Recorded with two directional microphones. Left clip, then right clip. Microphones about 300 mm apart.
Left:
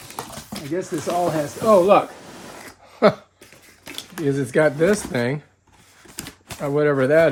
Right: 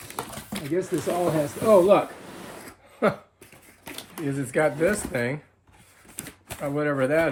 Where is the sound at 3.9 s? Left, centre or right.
Centre.